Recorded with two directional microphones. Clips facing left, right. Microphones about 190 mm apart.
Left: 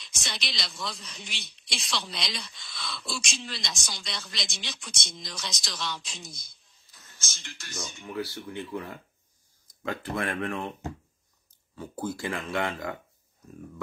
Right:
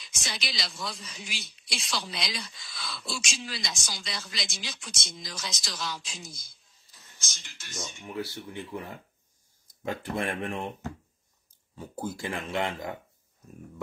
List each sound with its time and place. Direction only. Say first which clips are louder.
0.0 s speech: even; centre (ahead or behind)
7.1 s speech: left 4 dB; 15° right (ahead or behind)
9.8 s speech: even; 20° right (ahead or behind)
11.7 s speech: left 2 dB; 20° right (ahead or behind)